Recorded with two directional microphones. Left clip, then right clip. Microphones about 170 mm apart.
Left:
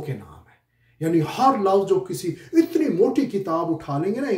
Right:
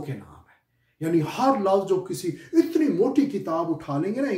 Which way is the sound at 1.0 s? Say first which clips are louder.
Left 3 dB; 10° left (ahead or behind).